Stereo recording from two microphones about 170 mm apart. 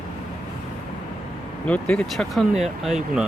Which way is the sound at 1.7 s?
5° left (ahead or behind).